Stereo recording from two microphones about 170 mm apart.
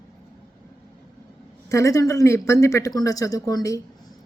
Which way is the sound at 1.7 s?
20° left (ahead or behind).